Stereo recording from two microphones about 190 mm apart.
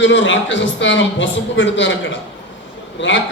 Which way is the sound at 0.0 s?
75° left (ahead or behind).